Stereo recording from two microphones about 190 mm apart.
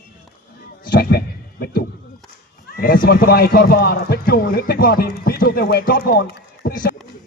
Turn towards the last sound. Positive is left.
turn(degrees=50)  # may be behind; listen again after turning